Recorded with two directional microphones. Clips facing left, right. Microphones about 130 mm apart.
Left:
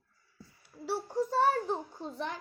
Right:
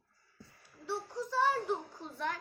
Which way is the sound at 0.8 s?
60° left (ahead or behind).